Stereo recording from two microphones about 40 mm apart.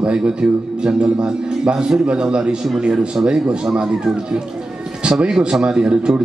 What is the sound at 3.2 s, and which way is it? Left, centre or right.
Speech, right.